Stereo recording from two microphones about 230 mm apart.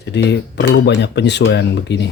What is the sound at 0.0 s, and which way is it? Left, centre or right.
Speech, left.